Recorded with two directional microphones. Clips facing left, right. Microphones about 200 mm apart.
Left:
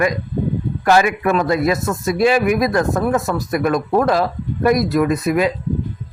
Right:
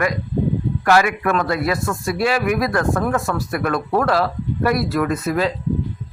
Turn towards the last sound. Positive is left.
turn(degrees=15)  # may be behind; listen again after turning